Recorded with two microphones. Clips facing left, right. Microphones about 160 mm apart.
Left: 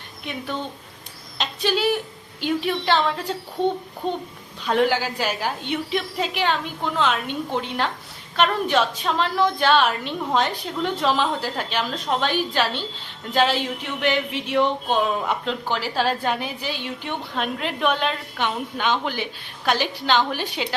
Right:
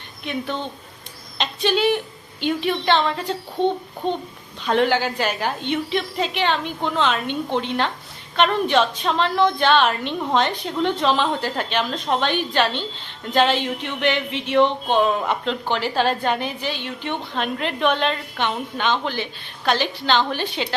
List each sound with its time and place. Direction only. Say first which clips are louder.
1.4 s a woman's voice: right 3 dB; 5° left (ahead or behind)